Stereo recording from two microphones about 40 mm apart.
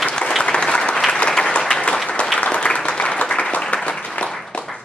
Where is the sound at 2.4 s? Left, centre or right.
Left.